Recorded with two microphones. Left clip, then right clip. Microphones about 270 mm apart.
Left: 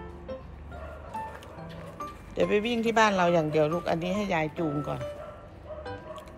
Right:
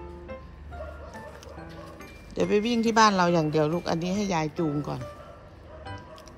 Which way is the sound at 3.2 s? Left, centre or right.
Right.